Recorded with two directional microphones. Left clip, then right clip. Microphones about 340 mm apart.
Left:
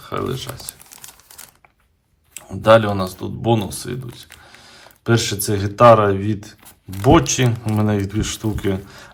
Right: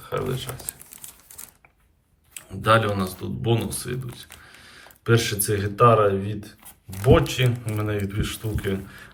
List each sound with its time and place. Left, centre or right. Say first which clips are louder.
0.1 s speech: left 3 dB; centre
2.3 s speech: left 7 dB; centre